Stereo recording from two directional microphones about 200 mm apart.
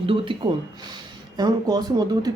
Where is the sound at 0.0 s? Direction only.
25° right (ahead or behind).